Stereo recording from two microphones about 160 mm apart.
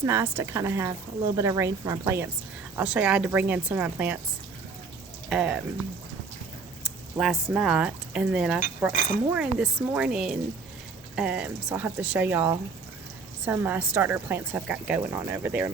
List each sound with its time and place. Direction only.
0.0 s a woman's voice: 15° right (ahead or behind)
5.3 s a woman's voice: 5° right (ahead or behind)
6.8 s speech: 5° right (ahead or behind)
8.9 s speech: 55° left (ahead or behind)
9.3 s a woman's voice: 5° right (ahead or behind)